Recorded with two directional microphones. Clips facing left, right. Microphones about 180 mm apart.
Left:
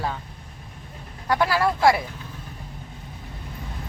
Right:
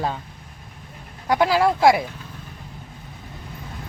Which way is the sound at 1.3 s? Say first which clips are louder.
Right 3 dB; 15° right (ahead or behind).